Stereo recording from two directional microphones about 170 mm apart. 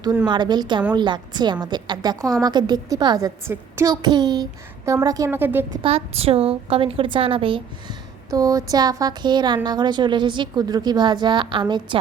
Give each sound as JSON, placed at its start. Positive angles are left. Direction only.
{"t": 0.3, "sound": "a woman's voice", "side_deg": -25}
{"t": 5.7, "sound": "a woman's voice", "side_deg": -35}
{"t": 8.3, "sound": "speech", "side_deg": -20}